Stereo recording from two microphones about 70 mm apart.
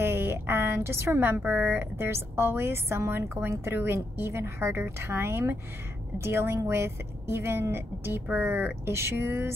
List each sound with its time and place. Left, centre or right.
0.0 s a sound: right
1.4 s speech: right
2.0 s a woman's voice: right